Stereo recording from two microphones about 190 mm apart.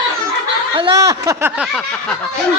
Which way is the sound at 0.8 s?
20° right (ahead or behind).